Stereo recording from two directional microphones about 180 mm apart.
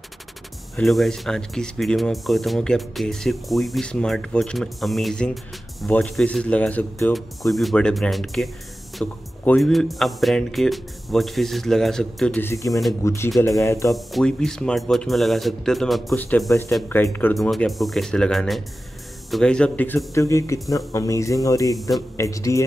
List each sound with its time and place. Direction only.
0.7 s speech: centre (ahead or behind)
12.4 s speech: 15° left (ahead or behind)
13.9 s speech: centre (ahead or behind); by 22.6 s 15° left (ahead or behind)